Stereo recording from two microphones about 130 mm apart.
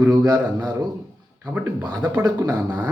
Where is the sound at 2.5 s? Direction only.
10° right (ahead or behind).